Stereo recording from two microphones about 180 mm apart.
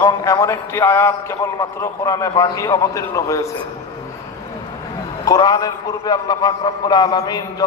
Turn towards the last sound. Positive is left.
turn(degrees=20)  # may be behind; listen again after turning